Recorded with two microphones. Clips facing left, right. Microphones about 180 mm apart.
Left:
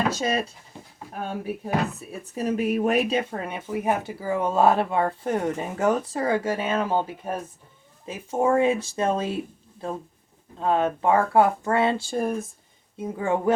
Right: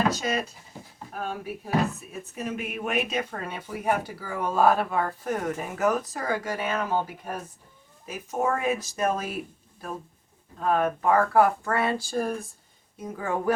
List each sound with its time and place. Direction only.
0.1 s speech: 30° left (ahead or behind)
2.3 s speech: 35° left (ahead or behind)